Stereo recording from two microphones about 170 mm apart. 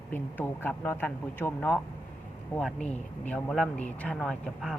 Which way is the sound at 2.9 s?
10° left (ahead or behind).